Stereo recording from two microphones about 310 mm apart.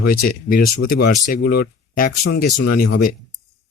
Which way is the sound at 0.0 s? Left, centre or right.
Left.